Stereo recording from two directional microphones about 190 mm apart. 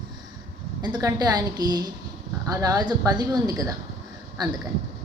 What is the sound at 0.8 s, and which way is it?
A woman's voice, 20° right (ahead or behind).